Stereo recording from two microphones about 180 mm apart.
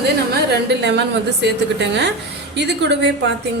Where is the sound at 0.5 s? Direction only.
70° right (ahead or behind).